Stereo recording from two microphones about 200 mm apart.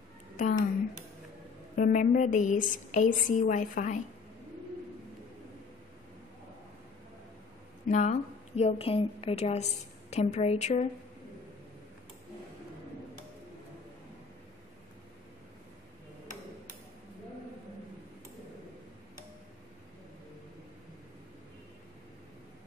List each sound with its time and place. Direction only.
0.4 s speech: 40° left (ahead or behind)
1.8 s a woman's voice: 40° left (ahead or behind)
7.9 s a woman's voice: 35° left (ahead or behind)